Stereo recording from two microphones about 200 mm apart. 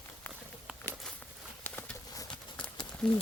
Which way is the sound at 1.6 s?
15° left (ahead or behind).